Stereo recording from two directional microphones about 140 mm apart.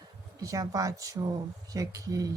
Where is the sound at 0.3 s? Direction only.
25° right (ahead or behind).